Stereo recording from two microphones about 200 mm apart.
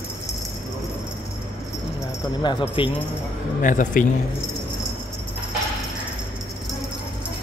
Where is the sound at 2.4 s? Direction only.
25° left (ahead or behind).